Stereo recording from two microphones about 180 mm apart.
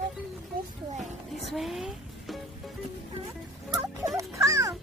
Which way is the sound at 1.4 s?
Centre (ahead or behind).